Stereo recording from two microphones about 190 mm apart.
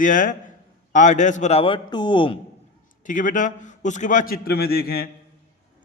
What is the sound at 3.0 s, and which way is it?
A man's voice, 40° left (ahead or behind).